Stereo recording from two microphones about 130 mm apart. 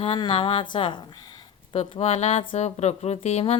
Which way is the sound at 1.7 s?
50° left (ahead or behind).